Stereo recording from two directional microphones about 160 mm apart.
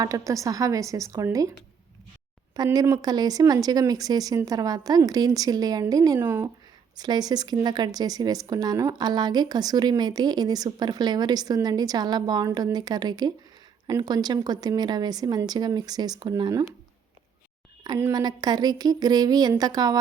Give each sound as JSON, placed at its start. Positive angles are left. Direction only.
{"t": 0.0, "sound": "a woman's voice", "side_deg": -20}
{"t": 2.6, "sound": "a woman's voice", "side_deg": -20}
{"t": 6.9, "sound": "a woman's voice", "side_deg": -25}
{"t": 17.8, "sound": "a woman's voice", "side_deg": -20}